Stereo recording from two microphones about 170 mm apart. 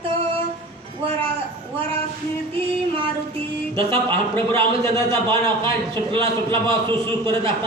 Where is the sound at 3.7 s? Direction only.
30° right (ahead or behind).